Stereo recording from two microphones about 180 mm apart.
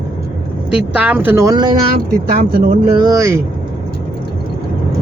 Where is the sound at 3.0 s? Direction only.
20° right (ahead or behind).